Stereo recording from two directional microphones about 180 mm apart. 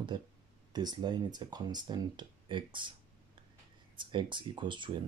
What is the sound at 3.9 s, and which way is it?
Speech, 25° right (ahead or behind).